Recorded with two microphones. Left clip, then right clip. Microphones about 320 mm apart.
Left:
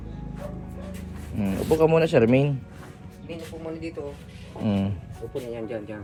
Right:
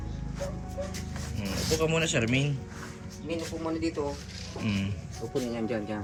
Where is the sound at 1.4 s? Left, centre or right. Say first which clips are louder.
Left 8 dB; centre.